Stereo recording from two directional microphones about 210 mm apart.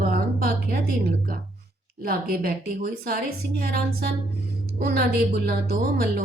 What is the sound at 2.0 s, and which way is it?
A woman's voice, 45° right (ahead or behind).